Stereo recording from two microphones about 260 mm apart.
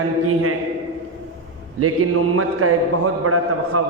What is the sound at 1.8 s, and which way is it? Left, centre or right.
A man's voice, right.